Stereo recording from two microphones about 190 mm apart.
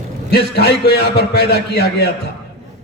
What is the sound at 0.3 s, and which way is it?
A man's voice, 60° left (ahead or behind).